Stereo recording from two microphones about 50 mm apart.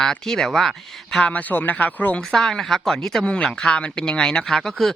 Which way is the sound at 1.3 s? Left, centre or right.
Left.